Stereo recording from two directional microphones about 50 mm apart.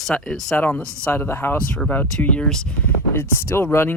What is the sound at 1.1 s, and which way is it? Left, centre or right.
Speech, left.